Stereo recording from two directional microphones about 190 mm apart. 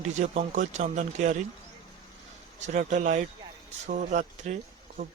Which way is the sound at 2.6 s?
40° right (ahead or behind).